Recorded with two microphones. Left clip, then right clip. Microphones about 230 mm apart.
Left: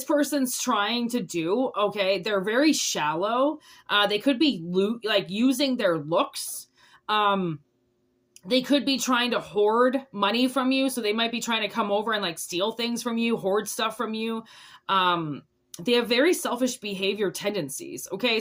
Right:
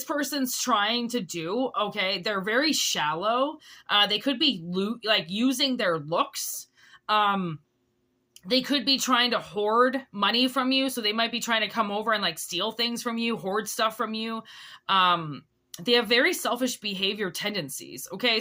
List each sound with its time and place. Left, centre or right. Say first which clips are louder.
0.0 s speech: left 5 dB; centre